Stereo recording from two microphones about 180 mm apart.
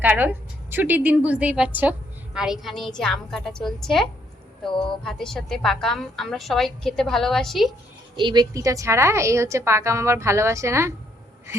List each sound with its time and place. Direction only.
0.0 s a woman's voice: 10° right (ahead or behind)
8.1 s a woman's voice: 25° right (ahead or behind)